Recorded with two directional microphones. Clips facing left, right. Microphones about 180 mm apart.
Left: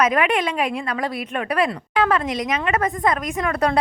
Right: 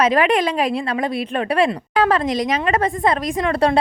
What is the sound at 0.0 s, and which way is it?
A woman's voice, 30° right (ahead or behind).